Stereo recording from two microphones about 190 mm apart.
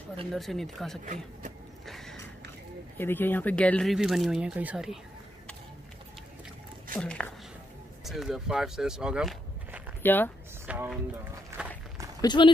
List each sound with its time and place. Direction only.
0.3 s speech: centre (ahead or behind)
1.0 s speech: 40° right (ahead or behind)
1.9 s a sound: centre (ahead or behind)
3.0 s speech: 10° left (ahead or behind); by 4.9 s 5° right (ahead or behind)
7.0 s speech: 5° left (ahead or behind)
10.0 s speech: 10° left (ahead or behind)
10.7 s speech: 5° right (ahead or behind)
11.5 s walk: 15° right (ahead or behind)
12.2 s speech: 25° left (ahead or behind)